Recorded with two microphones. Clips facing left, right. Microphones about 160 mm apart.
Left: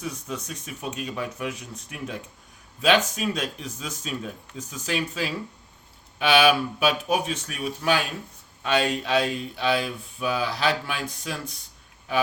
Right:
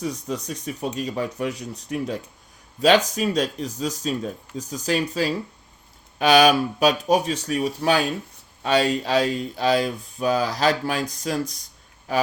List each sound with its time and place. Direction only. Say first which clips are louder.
0.0 s speech: right 5 dB; 35° right (ahead or behind)